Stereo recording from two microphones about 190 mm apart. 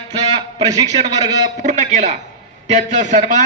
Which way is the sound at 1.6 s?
40° right (ahead or behind).